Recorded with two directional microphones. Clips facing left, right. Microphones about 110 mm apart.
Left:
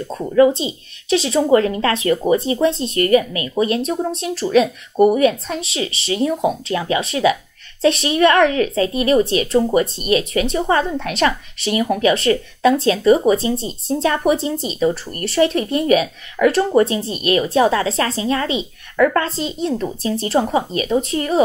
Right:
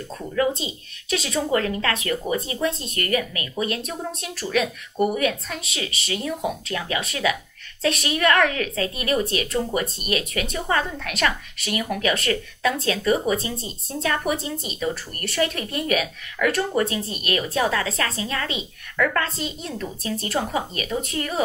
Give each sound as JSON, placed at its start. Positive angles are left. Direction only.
{"t": 0.1, "sound": "speech", "side_deg": 30}